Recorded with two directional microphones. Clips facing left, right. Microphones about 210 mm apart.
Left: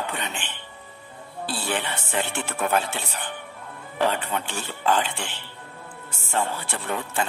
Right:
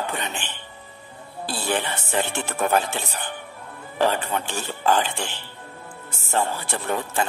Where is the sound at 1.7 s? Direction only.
40° right (ahead or behind).